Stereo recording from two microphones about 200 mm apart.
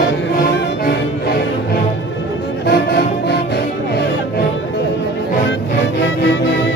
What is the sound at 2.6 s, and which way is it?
Music, 55° left (ahead or behind).